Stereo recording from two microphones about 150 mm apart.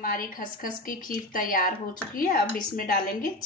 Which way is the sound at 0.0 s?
70° left (ahead or behind).